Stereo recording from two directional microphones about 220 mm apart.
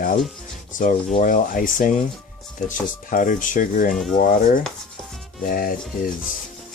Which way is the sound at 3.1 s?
35° left (ahead or behind).